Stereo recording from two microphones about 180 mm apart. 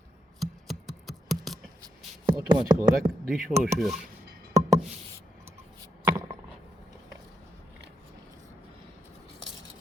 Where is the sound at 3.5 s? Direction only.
15° right (ahead or behind).